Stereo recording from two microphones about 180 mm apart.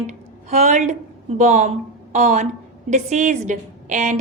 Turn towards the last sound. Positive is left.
turn(degrees=-45)  # may be behind; listen again after turning